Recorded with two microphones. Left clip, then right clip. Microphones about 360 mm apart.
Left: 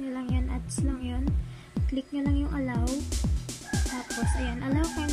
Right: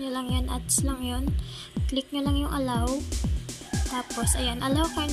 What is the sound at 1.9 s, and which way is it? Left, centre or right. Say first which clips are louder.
Speech: right 2 dB; right.